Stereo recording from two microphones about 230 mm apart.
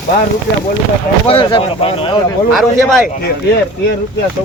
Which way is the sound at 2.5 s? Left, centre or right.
Centre.